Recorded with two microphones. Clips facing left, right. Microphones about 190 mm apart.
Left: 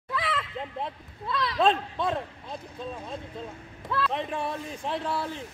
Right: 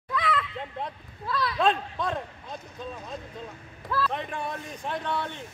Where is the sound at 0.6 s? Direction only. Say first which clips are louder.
Left 1 dB; centre (ahead or behind).